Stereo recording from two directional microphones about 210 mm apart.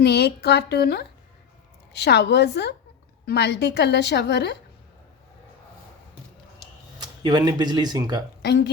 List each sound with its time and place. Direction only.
0.0 s a woman's voice: 50° left (ahead or behind)
7.0 s speech: 20° right (ahead or behind)
8.4 s speech: 55° left (ahead or behind)